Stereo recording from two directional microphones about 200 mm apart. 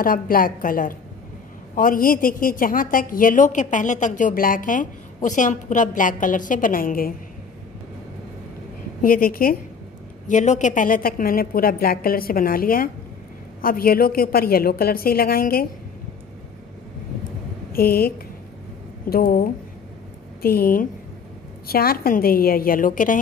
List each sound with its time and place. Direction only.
0.0 s a woman's voice: 45° left (ahead or behind)
9.0 s a woman's voice: 45° left (ahead or behind)
17.7 s a woman's voice: 50° left (ahead or behind)